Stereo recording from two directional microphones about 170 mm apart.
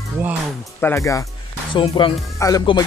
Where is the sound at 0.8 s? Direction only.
15° left (ahead or behind).